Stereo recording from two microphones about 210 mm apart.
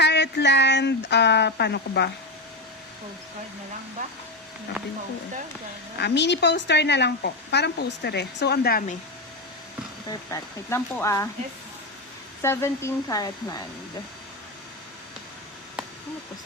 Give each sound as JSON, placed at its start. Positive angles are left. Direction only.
{"t": 0.0, "sound": "a woman's voice", "side_deg": 55}
{"t": 6.0, "sound": "a woman's voice", "side_deg": 55}
{"t": 10.1, "sound": "speech", "side_deg": 15}
{"t": 12.4, "sound": "speech", "side_deg": 15}